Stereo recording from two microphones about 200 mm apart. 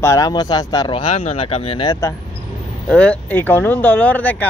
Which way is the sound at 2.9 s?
5° left (ahead or behind).